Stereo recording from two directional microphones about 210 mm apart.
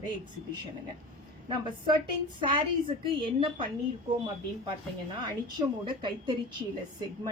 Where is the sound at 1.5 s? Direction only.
20° right (ahead or behind).